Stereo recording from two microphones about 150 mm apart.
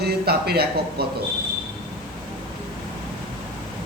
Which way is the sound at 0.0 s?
90° right.